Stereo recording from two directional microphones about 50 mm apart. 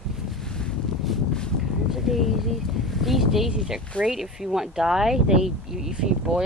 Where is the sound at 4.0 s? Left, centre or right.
Centre.